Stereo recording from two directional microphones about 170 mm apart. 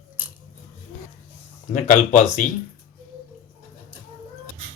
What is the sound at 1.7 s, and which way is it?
Speech, 45° left (ahead or behind).